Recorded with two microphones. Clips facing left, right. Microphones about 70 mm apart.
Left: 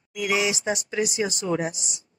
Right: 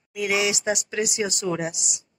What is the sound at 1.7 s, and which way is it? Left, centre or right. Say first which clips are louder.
Speech: right 1 dB; left.